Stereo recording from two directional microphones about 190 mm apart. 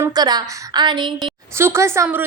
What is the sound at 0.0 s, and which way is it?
A woman's voice, 20° right (ahead or behind).